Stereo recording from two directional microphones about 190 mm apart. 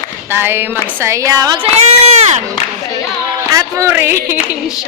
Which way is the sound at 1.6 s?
35° right (ahead or behind).